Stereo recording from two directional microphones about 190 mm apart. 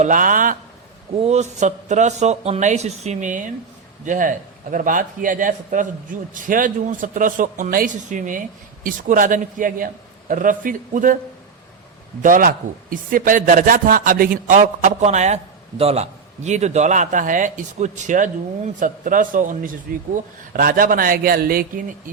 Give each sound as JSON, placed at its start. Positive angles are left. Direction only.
{"t": 0.0, "sound": "a man's voice", "side_deg": -45}
{"t": 12.2, "sound": "a man's voice", "side_deg": -45}